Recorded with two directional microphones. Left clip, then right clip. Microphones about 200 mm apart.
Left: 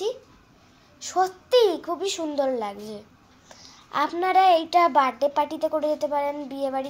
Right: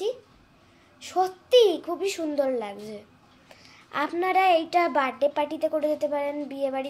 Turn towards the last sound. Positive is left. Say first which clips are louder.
# left 1 dB
turn(degrees=0)  # may be behind; listen again after turning